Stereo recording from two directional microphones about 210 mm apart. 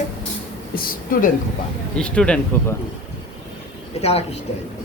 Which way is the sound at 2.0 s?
5° left (ahead or behind).